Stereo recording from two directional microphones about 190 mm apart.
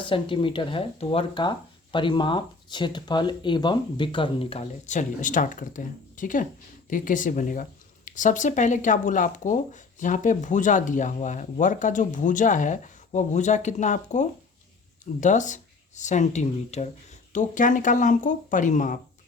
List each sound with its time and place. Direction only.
0.0 s speech: 25° left (ahead or behind); by 18.9 s 40° left (ahead or behind)